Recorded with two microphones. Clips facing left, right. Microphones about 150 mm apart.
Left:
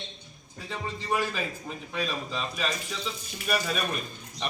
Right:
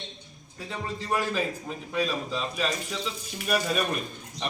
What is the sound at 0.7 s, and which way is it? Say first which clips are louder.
A man's voice: right 1 dB; centre (ahead or behind).